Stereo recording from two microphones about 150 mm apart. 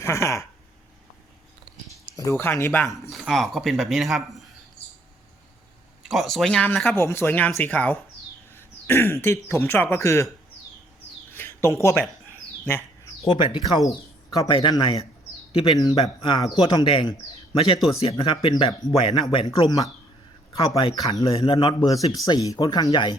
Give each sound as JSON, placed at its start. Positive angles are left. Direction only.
{"t": 0.0, "sound": "speech", "side_deg": 20}
{"t": 2.0, "sound": "speech", "side_deg": 20}
{"t": 2.9, "sound": "speech", "side_deg": 0}
{"t": 6.0, "sound": "speech", "side_deg": 0}
{"t": 11.3, "sound": "bird", "side_deg": 15}
{"t": 13.2, "sound": "speech", "side_deg": 35}